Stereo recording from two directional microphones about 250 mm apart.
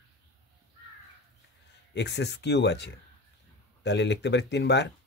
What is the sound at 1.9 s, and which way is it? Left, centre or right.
Speech, left.